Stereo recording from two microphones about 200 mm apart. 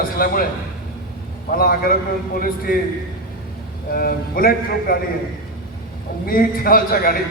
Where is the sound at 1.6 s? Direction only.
45° left (ahead or behind).